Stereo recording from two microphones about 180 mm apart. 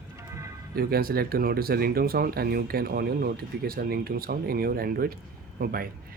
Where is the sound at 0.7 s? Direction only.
55° right (ahead or behind).